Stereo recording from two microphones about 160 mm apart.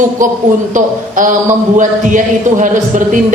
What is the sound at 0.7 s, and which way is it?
A man's voice, 55° right (ahead or behind).